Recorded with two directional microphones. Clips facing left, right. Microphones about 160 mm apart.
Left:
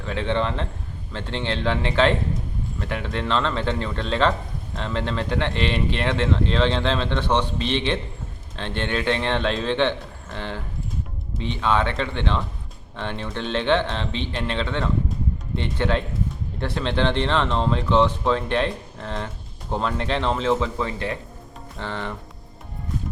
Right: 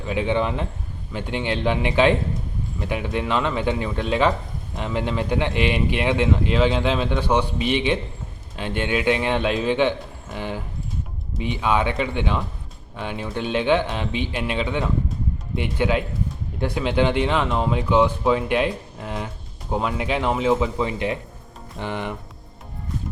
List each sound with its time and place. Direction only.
0.0 s speech: 15° right (ahead or behind)